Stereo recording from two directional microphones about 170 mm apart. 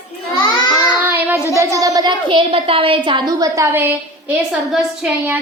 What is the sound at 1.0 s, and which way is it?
Child singing, 10° right (ahead or behind).